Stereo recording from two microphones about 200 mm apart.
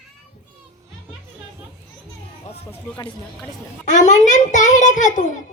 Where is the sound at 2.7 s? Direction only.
20° left (ahead or behind).